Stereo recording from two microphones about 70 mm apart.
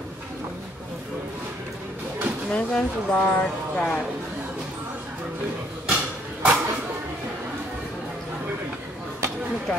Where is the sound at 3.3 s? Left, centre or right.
Left.